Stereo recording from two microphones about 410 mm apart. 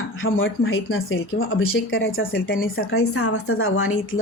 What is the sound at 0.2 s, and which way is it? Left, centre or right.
A woman's voice, left.